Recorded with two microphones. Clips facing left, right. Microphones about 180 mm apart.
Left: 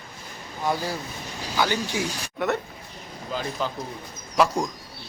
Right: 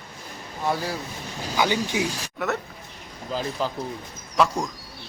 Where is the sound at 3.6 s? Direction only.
Centre (ahead or behind).